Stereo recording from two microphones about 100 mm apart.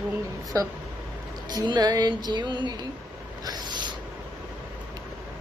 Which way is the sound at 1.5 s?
45° right (ahead or behind).